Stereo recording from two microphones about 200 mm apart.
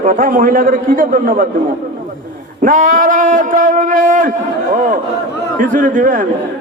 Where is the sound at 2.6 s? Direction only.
40° right (ahead or behind).